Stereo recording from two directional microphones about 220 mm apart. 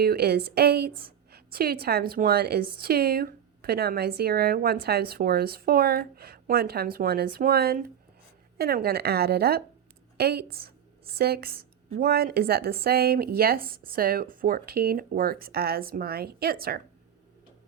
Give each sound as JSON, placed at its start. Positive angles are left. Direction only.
{"t": 0.0, "sound": "a woman's voice", "side_deg": -45}